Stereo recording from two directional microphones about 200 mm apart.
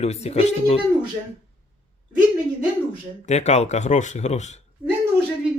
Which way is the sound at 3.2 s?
35° left (ahead or behind).